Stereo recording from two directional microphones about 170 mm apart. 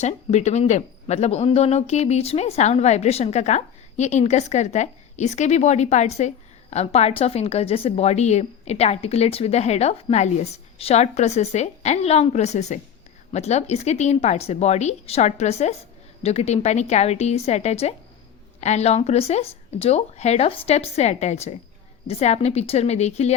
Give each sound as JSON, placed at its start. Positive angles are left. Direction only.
{"t": 0.0, "sound": "speech", "side_deg": 40}